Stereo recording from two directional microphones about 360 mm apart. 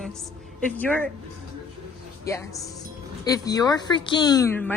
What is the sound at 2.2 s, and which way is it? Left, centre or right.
A woman's voice, centre.